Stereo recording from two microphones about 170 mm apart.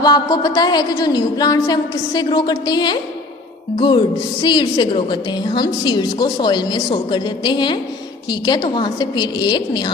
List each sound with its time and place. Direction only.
0.0 s a woman's voice: 25° left (ahead or behind)